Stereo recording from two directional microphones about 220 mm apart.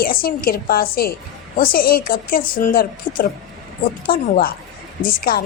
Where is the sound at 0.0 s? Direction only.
40° left (ahead or behind).